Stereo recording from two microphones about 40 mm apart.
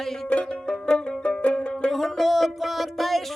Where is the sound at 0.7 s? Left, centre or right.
Left.